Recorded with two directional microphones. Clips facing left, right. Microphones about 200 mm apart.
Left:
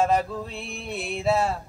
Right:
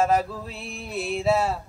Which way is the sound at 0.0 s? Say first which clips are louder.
Even; 5° right (ahead or behind).